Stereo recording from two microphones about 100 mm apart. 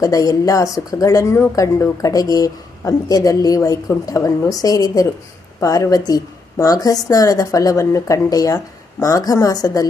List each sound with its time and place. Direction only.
0.0 s speech: 35° left (ahead or behind)